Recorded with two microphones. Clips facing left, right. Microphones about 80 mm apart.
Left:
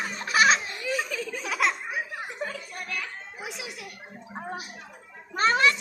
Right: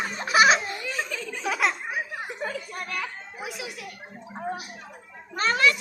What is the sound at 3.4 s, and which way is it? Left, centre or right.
Music, left.